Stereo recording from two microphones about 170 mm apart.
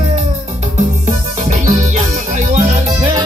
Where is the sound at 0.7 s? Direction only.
45° right (ahead or behind).